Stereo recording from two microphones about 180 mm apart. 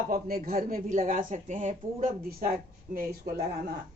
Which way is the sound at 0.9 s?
35° right (ahead or behind).